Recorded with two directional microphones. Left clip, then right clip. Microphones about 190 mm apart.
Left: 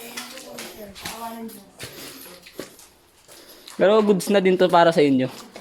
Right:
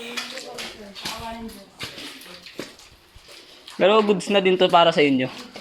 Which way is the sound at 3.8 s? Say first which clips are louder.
Even; 35° left (ahead or behind).